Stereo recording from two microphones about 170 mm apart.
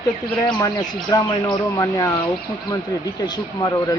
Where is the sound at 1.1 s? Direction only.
25° left (ahead or behind).